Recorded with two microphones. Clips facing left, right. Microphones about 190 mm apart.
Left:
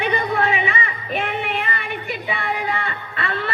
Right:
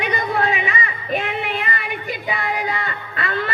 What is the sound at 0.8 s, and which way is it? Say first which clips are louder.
Female singing: right 1 dB; 40° right (ahead or behind).